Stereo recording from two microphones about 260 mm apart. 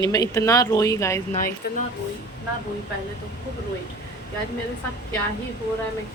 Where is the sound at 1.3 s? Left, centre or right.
Left.